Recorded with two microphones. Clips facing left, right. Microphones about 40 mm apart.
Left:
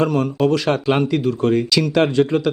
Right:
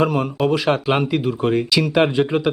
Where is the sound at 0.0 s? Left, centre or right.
Centre.